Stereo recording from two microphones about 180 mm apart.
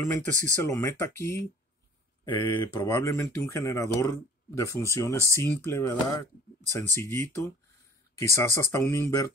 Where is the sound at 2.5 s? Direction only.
25° left (ahead or behind).